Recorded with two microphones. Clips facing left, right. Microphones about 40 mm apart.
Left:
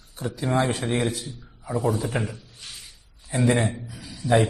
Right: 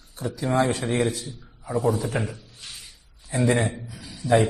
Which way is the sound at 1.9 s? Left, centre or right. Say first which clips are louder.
Even; centre.